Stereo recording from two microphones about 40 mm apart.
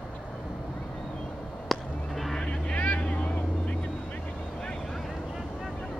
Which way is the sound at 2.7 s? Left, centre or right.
Left.